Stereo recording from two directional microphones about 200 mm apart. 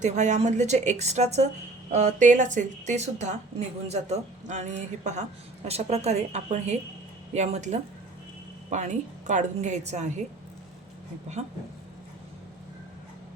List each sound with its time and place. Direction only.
0.0 s a woman's voice: 35° right (ahead or behind)